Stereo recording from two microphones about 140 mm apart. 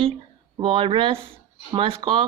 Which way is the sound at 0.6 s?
35° right (ahead or behind).